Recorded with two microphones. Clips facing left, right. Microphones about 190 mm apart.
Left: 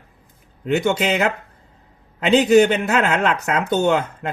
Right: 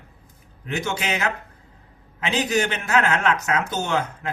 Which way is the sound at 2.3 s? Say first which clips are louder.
Left 10 dB; 60° left (ahead or behind).